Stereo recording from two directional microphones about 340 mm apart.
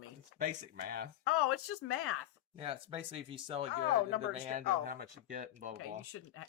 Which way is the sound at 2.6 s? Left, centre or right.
Centre.